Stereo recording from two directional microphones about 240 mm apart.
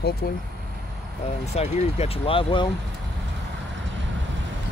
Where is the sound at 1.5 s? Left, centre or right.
Left.